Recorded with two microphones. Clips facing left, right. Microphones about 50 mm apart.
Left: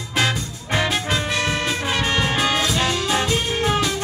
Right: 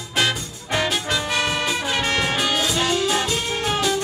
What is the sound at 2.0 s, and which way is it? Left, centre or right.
Music, left.